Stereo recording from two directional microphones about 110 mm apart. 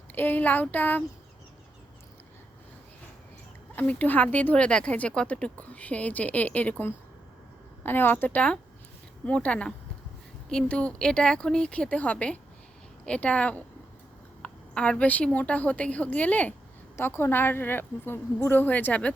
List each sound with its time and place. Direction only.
0.1 s a woman's voice: 15° left (ahead or behind)
3.8 s a woman's voice: 15° left (ahead or behind)